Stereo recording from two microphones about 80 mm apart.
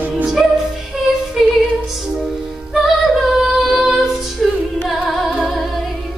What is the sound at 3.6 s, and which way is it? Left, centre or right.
Female singing, centre.